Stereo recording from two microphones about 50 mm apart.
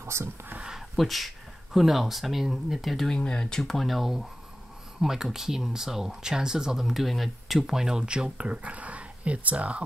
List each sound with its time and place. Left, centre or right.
0.0 s speech: right
0.7 s speech: centre
3.1 s speech: centre
3.7 s speech: centre; by 9.8 s right